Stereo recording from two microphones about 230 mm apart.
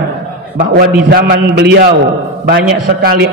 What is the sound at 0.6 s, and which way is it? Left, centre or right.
A man's voice, right.